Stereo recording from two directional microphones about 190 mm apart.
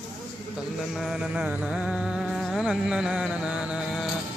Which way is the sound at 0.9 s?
Centre (ahead or behind).